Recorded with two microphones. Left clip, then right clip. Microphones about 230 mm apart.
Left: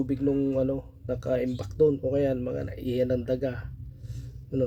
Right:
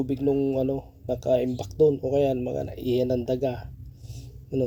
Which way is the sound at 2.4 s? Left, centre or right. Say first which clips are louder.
Right 3 dB; centre.